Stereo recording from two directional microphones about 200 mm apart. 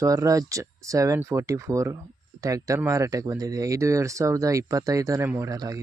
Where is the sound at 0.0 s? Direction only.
15° right (ahead or behind).